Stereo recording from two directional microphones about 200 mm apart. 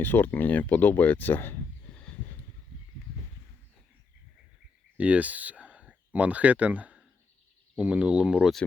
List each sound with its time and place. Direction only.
0.0 s speech: 10° left (ahead or behind)
4.9 s a sound: 5° right (ahead or behind)
6.1 s speech: 5° right (ahead or behind)